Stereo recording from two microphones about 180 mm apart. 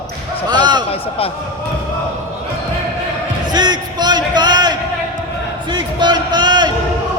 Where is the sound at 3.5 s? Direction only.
25° right (ahead or behind).